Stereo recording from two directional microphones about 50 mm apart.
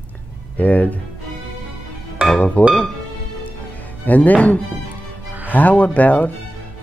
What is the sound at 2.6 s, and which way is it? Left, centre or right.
Speech, left.